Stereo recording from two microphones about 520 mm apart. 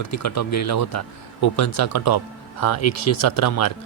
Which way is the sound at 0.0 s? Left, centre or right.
Left.